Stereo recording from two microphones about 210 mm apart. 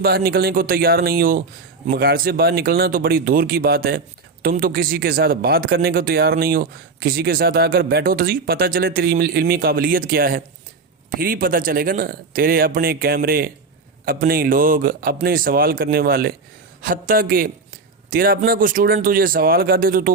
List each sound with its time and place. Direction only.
0.0 s speech: 45° right (ahead or behind)